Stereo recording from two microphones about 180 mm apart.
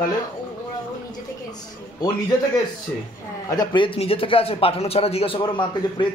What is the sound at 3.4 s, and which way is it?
A man's voice, 25° left (ahead or behind).